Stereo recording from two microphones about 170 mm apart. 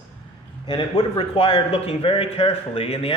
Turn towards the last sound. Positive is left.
turn(degrees=35)  # may be behind; listen again after turning